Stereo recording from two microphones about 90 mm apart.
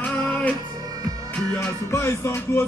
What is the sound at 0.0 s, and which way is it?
Music, 15° left (ahead or behind).